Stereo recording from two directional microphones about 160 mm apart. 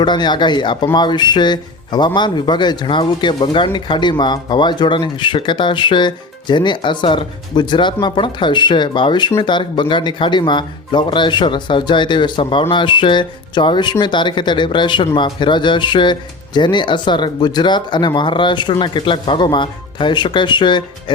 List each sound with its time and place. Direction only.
0.0 s speech: 30° left (ahead or behind)